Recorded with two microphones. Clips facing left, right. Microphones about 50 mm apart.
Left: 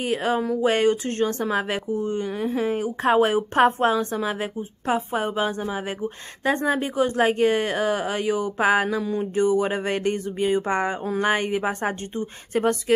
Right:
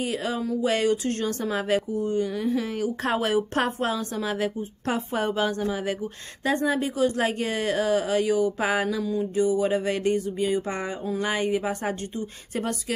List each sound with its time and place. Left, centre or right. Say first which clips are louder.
0.0 s a woman's voice: left 4 dB; left; by 5.7 s centre
6.4 s speech: left 2 dB; left